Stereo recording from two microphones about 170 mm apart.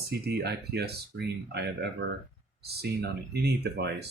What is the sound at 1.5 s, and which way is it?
Speech, 85° right.